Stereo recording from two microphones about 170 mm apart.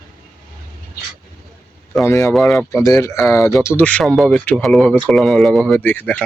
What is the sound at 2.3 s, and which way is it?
Speech, centre (ahead or behind).